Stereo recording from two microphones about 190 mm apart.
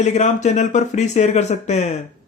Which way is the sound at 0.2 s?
40° left (ahead or behind).